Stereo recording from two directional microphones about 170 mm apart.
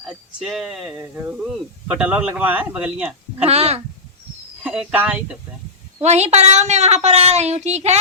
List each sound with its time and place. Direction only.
0.4 s speech: centre (ahead or behind)
3.3 s a woman's voice: 40° right (ahead or behind)
4.6 s speech: 5° right (ahead or behind)
6.0 s a woman's voice: 40° right (ahead or behind)